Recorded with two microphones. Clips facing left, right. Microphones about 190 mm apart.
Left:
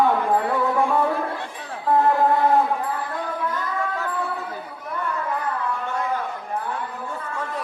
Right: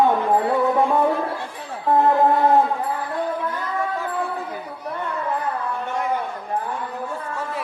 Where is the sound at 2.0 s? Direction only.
20° right (ahead or behind).